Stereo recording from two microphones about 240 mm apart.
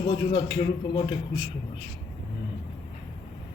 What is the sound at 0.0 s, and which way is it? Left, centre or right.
A man's voice, centre.